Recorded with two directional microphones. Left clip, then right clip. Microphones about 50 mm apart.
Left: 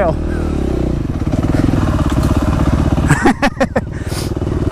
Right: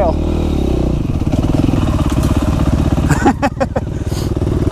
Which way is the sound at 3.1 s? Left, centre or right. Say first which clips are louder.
Left 1 dB; left.